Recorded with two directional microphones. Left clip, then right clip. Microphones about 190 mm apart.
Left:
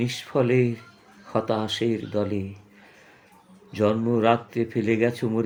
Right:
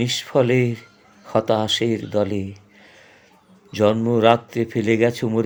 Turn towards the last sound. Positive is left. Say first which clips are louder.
# right 5 dB
turn(degrees=-50)  # may be behind; listen again after turning